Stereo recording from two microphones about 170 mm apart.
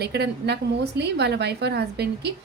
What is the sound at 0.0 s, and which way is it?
A woman's voice, 75° right (ahead or behind).